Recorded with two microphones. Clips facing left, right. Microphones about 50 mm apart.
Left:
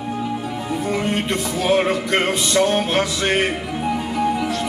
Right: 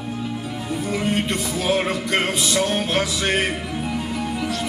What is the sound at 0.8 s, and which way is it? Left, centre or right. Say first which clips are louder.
Music: left 1 dB; centre.